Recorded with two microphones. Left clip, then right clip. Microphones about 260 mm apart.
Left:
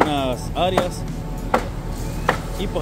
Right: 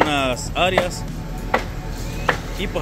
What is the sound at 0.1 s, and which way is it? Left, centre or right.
Music, centre.